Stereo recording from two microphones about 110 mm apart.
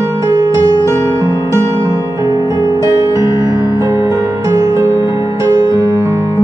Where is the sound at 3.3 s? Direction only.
35° left (ahead or behind).